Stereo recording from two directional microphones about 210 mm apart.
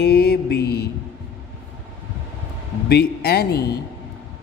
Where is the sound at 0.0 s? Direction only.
50° left (ahead or behind).